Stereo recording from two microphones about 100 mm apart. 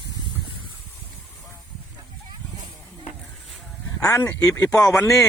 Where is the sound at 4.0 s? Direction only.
30° left (ahead or behind).